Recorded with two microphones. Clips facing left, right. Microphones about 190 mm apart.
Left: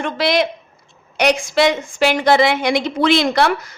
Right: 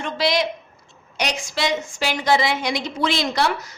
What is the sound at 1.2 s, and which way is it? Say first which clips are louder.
A woman's voice: left 9 dB; 55° left (ahead or behind).